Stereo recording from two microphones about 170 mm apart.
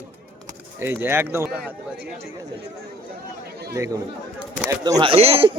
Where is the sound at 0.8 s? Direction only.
15° right (ahead or behind).